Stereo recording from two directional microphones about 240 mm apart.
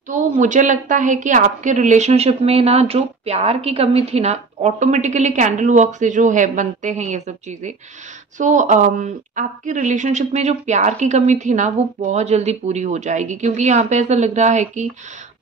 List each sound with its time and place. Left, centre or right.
0.1 s a woman's voice: right